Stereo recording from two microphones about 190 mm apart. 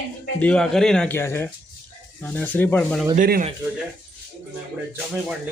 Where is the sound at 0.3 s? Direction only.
5° left (ahead or behind).